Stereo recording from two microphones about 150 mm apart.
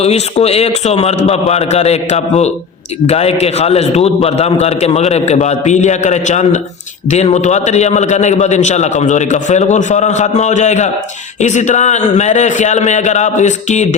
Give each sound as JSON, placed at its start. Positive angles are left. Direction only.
{"t": 0.0, "sound": "a man's voice", "side_deg": 45}